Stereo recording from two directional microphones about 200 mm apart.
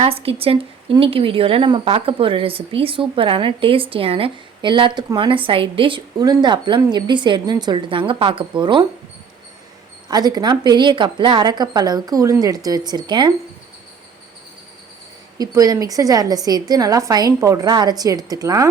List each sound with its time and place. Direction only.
0.0 s speech: 30° right (ahead or behind)
10.1 s speech: 20° right (ahead or behind)
15.4 s a woman's voice: 15° right (ahead or behind)